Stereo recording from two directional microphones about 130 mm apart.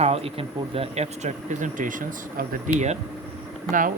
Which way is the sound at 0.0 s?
50° right (ahead or behind).